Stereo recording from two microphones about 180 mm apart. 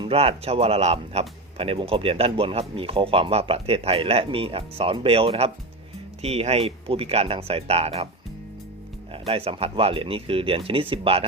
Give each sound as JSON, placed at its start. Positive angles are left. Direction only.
{"t": 0.0, "sound": "speech", "side_deg": -35}
{"t": 9.1, "sound": "speech", "side_deg": -30}